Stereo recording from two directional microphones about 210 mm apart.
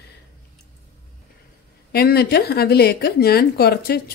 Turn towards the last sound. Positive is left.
turn(degrees=50)  # may be behind; listen again after turning